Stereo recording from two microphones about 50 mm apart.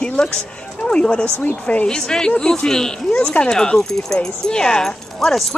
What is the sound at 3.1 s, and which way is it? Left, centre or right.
Speech, left.